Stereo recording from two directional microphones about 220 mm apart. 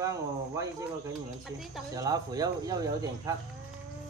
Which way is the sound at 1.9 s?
15° right (ahead or behind).